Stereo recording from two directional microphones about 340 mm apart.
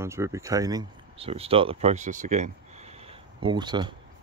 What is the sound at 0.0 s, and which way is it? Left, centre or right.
Speech, centre.